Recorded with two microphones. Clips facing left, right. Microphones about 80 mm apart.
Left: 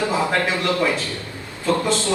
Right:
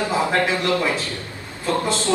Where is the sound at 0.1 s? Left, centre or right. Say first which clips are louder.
Right 1 dB; right.